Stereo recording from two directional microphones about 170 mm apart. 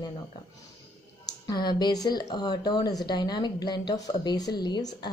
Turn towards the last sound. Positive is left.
turn(degrees=25)  # may be behind; listen again after turning